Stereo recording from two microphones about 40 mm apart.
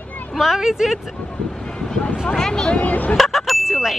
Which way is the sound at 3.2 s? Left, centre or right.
Centre.